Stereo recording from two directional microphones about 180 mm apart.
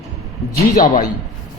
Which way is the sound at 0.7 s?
50° left (ahead or behind).